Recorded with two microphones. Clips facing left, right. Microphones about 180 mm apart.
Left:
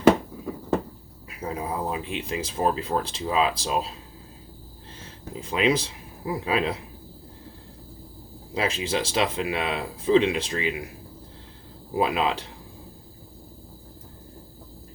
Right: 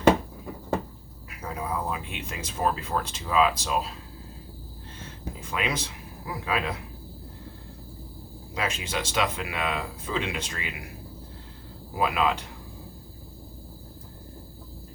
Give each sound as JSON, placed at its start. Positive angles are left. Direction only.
{"t": 1.4, "sound": "speech", "side_deg": 30}
{"t": 5.4, "sound": "speech", "side_deg": 30}
{"t": 8.5, "sound": "speech", "side_deg": 30}
{"t": 11.9, "sound": "speech", "side_deg": 30}